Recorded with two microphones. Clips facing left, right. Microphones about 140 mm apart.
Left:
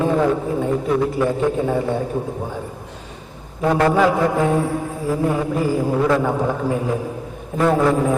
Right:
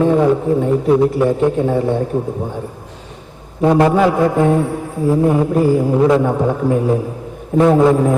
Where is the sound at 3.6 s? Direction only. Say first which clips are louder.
Right 4 dB; 20° right (ahead or behind).